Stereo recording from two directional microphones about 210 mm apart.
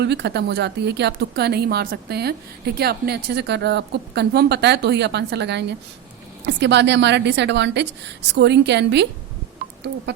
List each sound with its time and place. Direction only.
0.0 s a woman's voice: 55° right (ahead or behind)